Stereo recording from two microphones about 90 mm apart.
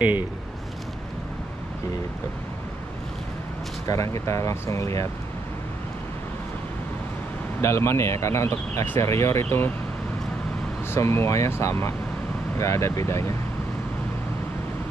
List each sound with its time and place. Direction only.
3.9 s speech: 35° left (ahead or behind)
7.6 s speech: 30° left (ahead or behind)
10.9 s speech: 30° left (ahead or behind)